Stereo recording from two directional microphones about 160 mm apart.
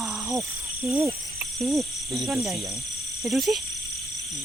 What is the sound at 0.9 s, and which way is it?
Speech, 20° right (ahead or behind).